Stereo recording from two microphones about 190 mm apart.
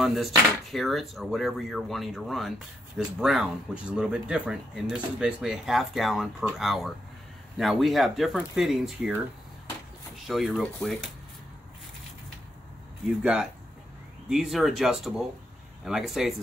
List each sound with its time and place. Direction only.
0.0 s speech: centre (ahead or behind)
10.2 s speech: centre (ahead or behind)
13.2 s speech: 5° right (ahead or behind)